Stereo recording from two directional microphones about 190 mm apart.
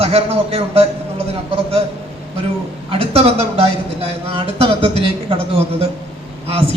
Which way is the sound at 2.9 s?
30° right (ahead or behind).